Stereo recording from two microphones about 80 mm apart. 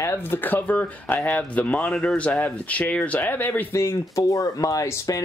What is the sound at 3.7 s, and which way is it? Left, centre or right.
Speech, left.